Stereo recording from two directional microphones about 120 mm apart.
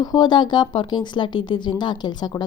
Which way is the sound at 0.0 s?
35° left (ahead or behind).